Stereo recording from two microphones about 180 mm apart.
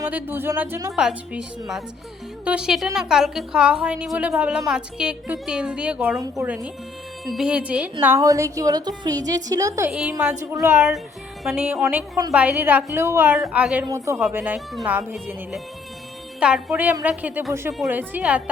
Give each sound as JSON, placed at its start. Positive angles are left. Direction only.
{"t": 0.0, "sound": "speech", "side_deg": -10}
{"t": 0.9, "sound": "a woman's voice", "side_deg": -5}
{"t": 9.9, "sound": "a woman's voice", "side_deg": -5}
{"t": 10.4, "sound": "speech", "side_deg": -15}
{"t": 13.9, "sound": "speech", "side_deg": -15}